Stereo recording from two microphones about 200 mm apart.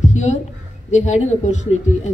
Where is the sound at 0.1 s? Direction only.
35° left (ahead or behind).